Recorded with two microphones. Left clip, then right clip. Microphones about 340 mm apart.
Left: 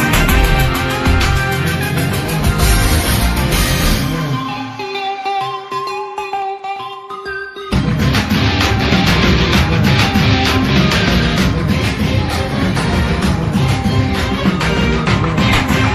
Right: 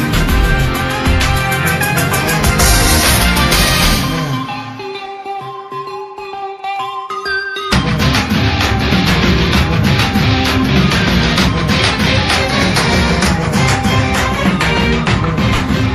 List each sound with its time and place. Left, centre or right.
0.1 s music: centre
0.7 s music: centre
8.0 s music: centre
12.5 s music: right
14.1 s music: centre
15.3 s music: centre